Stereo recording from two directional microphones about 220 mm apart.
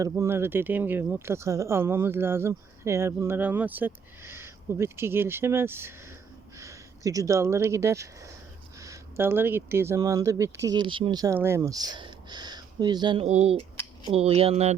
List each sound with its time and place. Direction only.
0.0 s speech: 10° right (ahead or behind); by 14.8 s 30° right (ahead or behind)